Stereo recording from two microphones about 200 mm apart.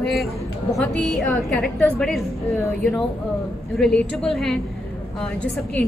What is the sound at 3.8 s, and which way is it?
A woman's voice, centre (ahead or behind).